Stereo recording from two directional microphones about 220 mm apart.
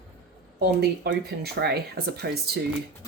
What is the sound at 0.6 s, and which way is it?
Speech, 45° right (ahead or behind).